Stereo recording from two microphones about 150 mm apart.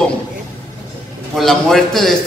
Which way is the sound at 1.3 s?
Centre (ahead or behind).